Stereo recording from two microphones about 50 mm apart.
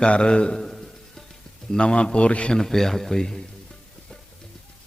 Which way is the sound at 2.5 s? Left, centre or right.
Centre.